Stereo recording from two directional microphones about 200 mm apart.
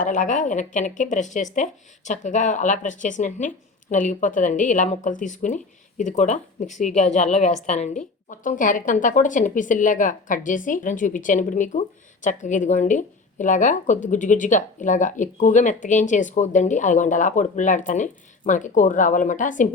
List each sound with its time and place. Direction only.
0.0 s a woman's voice: 40° left (ahead or behind)